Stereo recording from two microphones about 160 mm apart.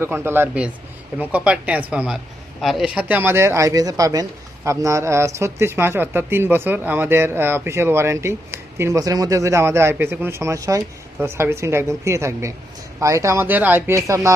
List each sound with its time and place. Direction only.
0.0 s speech: 15° right (ahead or behind)